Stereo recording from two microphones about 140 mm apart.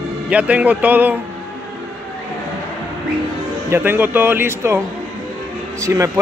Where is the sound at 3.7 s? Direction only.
15° right (ahead or behind).